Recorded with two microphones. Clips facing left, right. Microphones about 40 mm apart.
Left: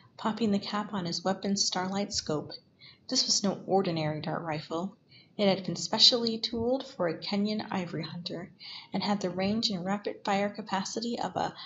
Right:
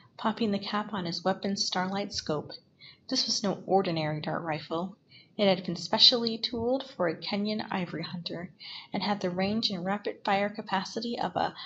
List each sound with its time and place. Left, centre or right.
0.2 s a woman's voice: centre